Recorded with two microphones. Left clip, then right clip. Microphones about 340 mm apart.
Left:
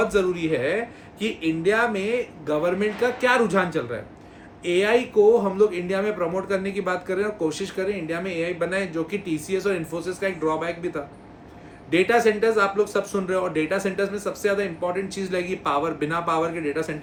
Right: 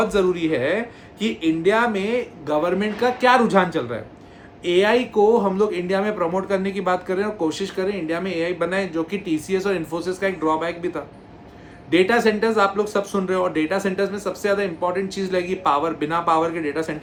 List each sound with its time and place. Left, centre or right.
0.0 s speech: centre